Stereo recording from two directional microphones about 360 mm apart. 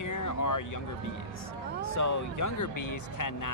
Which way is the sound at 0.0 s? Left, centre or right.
Left.